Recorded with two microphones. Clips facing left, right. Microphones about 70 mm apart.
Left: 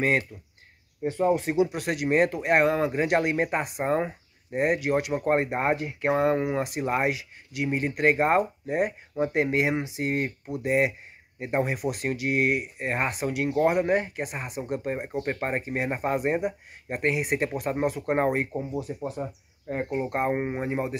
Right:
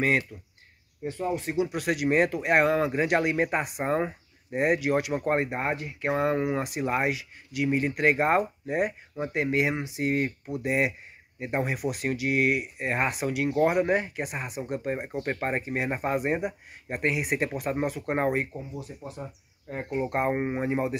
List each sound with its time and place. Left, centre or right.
0.0 s speech: left
1.7 s speech: centre
5.5 s speech: left
6.1 s speech: centre
9.2 s speech: centre
9.6 s speech: centre
18.3 s speech: left
20.1 s speech: centre